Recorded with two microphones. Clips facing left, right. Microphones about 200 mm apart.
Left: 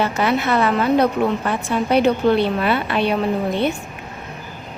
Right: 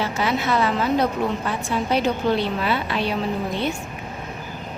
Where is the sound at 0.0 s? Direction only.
60° left (ahead or behind).